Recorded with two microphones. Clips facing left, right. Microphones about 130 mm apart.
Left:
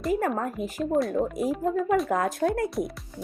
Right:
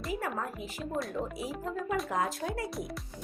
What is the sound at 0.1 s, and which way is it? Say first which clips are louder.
Speech: left 9 dB; 45° left (ahead or behind).